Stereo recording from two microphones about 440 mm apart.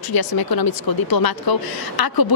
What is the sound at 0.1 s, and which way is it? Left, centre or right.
Speech, left.